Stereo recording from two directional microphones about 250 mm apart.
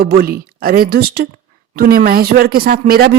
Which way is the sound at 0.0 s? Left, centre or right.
Right.